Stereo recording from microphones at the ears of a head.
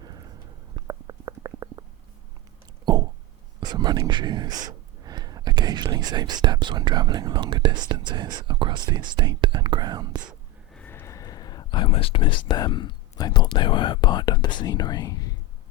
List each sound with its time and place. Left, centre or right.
0.0 s stomach rumble: right
3.6 s speech: right
10.8 s speech: left